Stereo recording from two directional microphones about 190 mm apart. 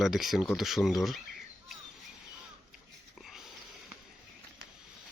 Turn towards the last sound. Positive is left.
turn(degrees=0)  # may be behind; listen again after turning